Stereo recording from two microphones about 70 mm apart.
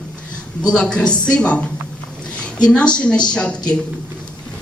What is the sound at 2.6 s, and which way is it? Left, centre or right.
Speech, centre.